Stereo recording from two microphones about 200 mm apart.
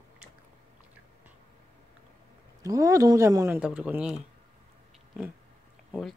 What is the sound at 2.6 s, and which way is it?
Speech, 15° right (ahead or behind).